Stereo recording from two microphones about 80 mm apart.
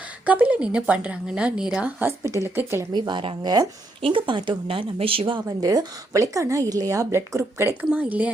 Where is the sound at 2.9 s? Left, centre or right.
Right.